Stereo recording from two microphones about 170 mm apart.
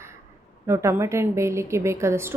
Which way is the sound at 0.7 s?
15° right (ahead or behind).